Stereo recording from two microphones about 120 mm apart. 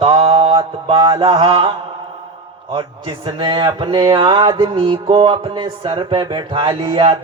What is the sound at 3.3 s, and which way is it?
Mantra, 40° right (ahead or behind).